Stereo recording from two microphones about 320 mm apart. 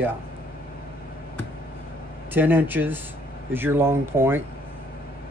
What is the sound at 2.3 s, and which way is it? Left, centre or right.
Speech, centre.